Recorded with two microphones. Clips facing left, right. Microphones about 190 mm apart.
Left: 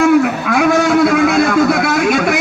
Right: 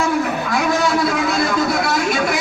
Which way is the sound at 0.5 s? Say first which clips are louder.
Left 7 dB; 55° left (ahead or behind).